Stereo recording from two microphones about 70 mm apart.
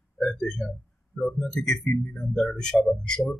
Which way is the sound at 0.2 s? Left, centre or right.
Centre.